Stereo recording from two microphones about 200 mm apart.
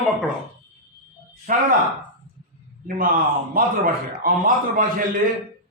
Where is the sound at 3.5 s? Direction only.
45° right (ahead or behind).